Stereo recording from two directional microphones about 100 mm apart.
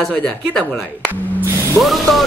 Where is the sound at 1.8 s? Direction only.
Centre (ahead or behind).